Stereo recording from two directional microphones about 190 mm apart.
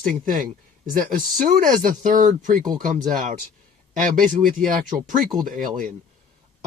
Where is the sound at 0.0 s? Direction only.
45° right (ahead or behind).